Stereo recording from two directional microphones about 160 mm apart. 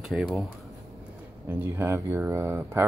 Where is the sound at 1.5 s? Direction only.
15° right (ahead or behind).